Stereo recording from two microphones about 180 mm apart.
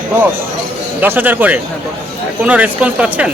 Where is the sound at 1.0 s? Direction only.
10° right (ahead or behind).